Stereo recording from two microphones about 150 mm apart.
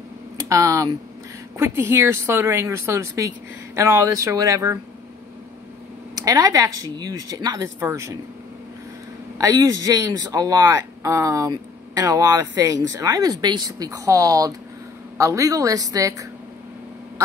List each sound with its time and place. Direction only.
0.4 s a sound: 20° right (ahead or behind)
1.6 s speech: 15° right (ahead or behind)
6.1 s speech: 25° right (ahead or behind)
9.4 s speech: 20° right (ahead or behind)